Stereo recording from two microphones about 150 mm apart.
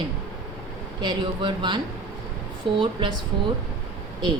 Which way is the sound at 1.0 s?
30° right (ahead or behind).